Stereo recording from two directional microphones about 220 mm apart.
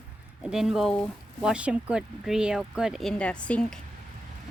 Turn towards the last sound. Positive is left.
turn(degrees=5)  # may be behind; listen again after turning